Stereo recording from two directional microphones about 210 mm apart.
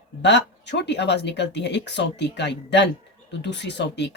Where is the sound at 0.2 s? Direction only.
55° left (ahead or behind).